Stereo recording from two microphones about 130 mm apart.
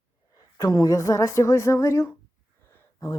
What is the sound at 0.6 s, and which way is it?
Speech, 25° left (ahead or behind).